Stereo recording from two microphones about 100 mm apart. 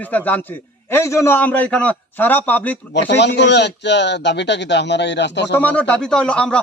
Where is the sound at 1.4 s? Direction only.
15° left (ahead or behind).